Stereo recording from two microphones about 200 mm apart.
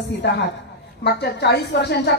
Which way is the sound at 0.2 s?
60° left (ahead or behind).